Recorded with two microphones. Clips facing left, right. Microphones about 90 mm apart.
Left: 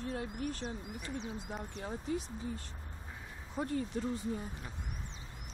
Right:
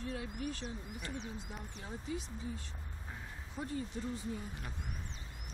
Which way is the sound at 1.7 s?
50° left (ahead or behind).